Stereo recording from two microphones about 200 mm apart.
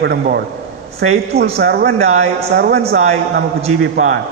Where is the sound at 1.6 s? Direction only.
50° right (ahead or behind).